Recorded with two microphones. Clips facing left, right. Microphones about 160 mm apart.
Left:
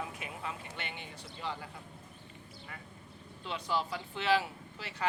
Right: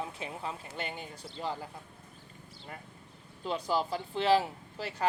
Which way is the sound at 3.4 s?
40° right (ahead or behind).